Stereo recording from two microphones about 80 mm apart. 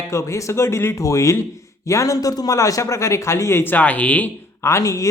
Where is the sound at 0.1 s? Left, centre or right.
Left.